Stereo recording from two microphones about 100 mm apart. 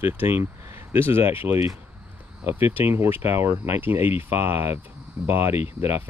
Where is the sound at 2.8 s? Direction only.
20° right (ahead or behind).